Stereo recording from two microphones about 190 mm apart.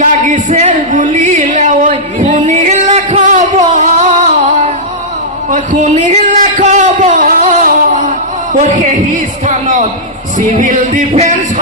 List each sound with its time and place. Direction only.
0.0 s speech: 40° right (ahead or behind)
2.3 s music: 40° right (ahead or behind)
5.5 s a sound: 40° right (ahead or behind)
8.5 s music: 40° right (ahead or behind)
9.5 s a sound: 40° right (ahead or behind)
10.3 s music: 40° right (ahead or behind)